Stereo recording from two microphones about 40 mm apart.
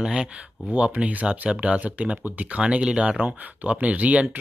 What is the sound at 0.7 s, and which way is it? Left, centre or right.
Speech, right.